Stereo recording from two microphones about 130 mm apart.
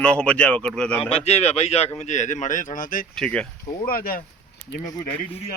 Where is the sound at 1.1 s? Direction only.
55° left (ahead or behind); by 3.1 s 90° left.